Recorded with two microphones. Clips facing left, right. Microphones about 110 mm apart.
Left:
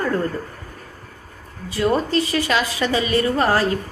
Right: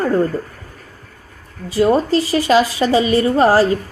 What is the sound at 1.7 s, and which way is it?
A woman's voice, 30° right (ahead or behind).